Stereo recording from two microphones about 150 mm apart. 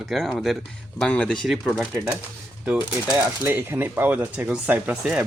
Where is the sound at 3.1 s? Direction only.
10° right (ahead or behind).